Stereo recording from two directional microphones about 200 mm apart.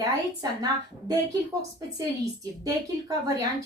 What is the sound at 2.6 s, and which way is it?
A woman's voice, 15° right (ahead or behind).